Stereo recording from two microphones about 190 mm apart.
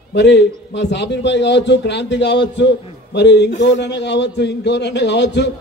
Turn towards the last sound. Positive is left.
turn(degrees=65)  # may be behind; listen again after turning